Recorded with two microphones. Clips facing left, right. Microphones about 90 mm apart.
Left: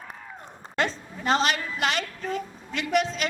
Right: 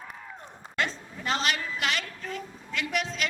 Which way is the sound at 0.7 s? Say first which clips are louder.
Left 4 dB; 35° left (ahead or behind).